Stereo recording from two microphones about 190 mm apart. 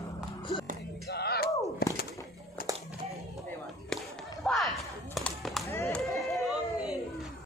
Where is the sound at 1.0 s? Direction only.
60° left (ahead or behind).